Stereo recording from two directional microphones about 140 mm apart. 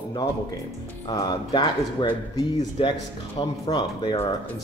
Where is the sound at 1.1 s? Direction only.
30° left (ahead or behind).